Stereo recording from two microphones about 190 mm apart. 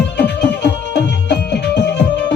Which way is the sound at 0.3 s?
60° left (ahead or behind).